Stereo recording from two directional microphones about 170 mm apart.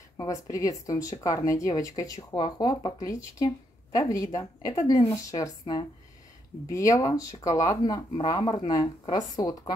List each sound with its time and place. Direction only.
0.2 s speech: 20° left (ahead or behind)